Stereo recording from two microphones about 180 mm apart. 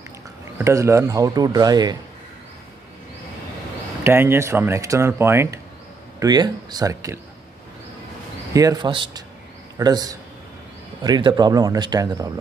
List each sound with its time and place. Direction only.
0.6 s speech: 15° right (ahead or behind)
4.0 s speech: 15° right (ahead or behind)
8.5 s speech: 20° right (ahead or behind)